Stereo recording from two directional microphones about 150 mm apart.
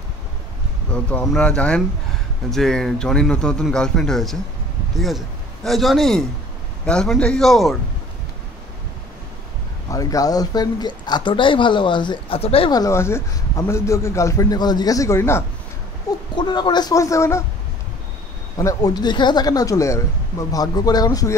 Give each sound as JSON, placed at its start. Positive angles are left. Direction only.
{"t": 0.9, "sound": "a man's voice", "side_deg": 5}
{"t": 9.8, "sound": "speech", "side_deg": 20}
{"t": 12.7, "sound": "speech", "side_deg": 20}
{"t": 16.3, "sound": "speech", "side_deg": 30}
{"t": 18.6, "sound": "speech", "side_deg": 25}